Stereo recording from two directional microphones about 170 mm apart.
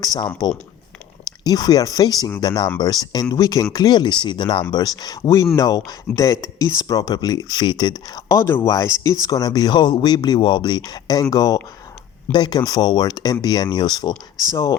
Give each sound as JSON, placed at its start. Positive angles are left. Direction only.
{"t": 0.0, "sound": "speech", "side_deg": 20}
{"t": 1.5, "sound": "speech", "side_deg": 25}